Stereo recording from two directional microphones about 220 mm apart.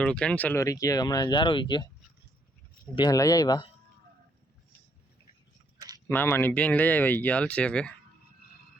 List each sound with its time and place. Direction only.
0.0 s speech: 5° left (ahead or behind); by 1.9 s 20° left (ahead or behind)
2.9 s speech: 20° left (ahead or behind)
6.1 s speech: 10° left (ahead or behind)